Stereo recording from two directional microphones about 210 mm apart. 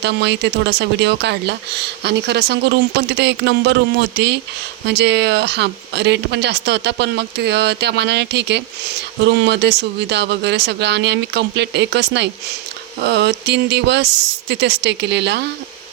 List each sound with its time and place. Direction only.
0.0 s speech: 55° right (ahead or behind)